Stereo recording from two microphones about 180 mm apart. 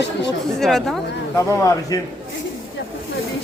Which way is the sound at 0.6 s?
Centre (ahead or behind).